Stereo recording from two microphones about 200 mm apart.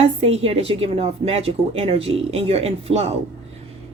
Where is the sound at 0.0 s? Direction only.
30° right (ahead or behind).